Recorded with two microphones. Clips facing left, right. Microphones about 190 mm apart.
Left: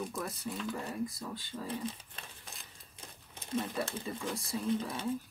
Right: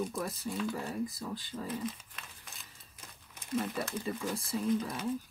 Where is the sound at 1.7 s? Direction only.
30° left (ahead or behind).